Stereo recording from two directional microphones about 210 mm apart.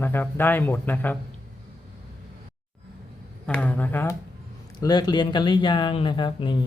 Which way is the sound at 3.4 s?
5° left (ahead or behind).